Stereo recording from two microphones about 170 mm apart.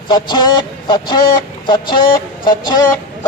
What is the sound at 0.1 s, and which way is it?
Speech, 25° left (ahead or behind).